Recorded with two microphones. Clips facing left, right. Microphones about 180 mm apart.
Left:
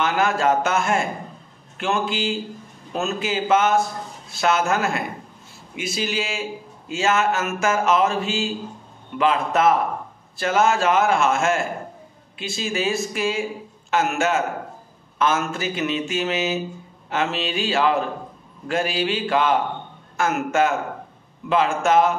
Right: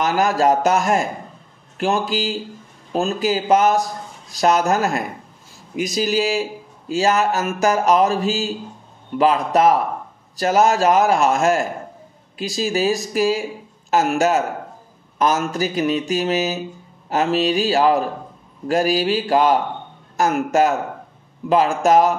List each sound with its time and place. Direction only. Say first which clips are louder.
0.0 s a man's voice: right 3 dB; 40° right (ahead or behind)